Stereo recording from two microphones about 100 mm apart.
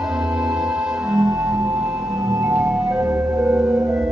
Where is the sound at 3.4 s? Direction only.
15° right (ahead or behind).